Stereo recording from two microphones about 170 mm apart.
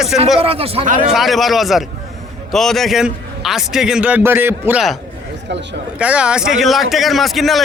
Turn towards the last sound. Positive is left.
turn(degrees=0)  # may be behind; listen again after turning